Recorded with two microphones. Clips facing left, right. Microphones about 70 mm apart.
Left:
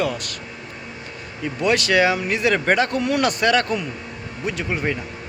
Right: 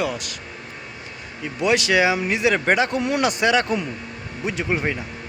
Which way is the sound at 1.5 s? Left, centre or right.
Centre.